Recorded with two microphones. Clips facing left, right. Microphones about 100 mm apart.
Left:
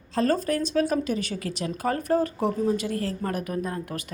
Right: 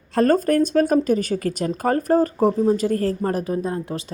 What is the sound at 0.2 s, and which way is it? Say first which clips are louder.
Speech: right 7 dB; 50° right (ahead or behind).